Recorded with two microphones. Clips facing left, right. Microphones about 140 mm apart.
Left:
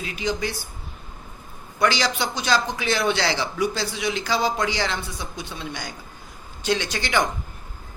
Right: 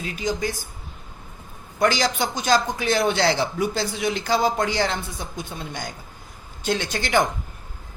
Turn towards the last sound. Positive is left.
turn(degrees=-50)  # may be behind; listen again after turning